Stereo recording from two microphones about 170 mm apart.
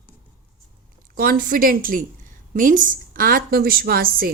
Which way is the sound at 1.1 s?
55° right (ahead or behind).